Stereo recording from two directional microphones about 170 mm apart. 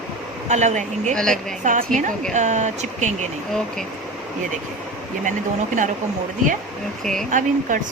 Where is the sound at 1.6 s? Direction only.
50° right (ahead or behind).